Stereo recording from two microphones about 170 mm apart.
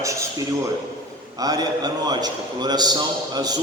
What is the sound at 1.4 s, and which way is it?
A man's voice, 20° right (ahead or behind).